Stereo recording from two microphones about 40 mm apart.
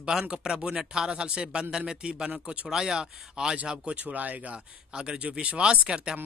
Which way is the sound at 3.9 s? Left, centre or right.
Right.